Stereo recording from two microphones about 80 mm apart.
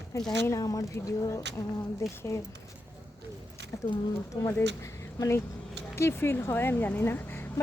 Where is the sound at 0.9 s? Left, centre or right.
Left.